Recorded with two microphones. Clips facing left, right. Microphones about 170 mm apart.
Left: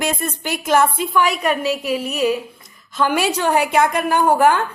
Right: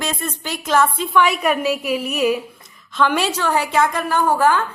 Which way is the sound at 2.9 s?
10° left (ahead or behind).